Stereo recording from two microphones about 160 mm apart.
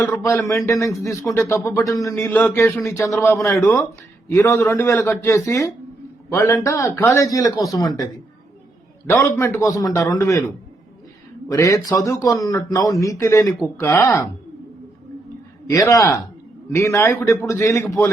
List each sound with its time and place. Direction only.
0.1 s speech: 10° left (ahead or behind)
0.4 s speech: 20° left (ahead or behind)
9.4 s speech: 15° left (ahead or behind)
11.5 s speech: 20° left (ahead or behind)
15.7 s speech: 20° left (ahead or behind)